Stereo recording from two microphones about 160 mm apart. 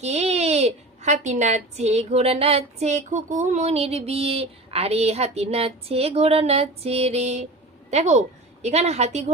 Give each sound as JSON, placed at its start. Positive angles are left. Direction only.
{"t": 0.0, "sound": "a woman's voice", "side_deg": -45}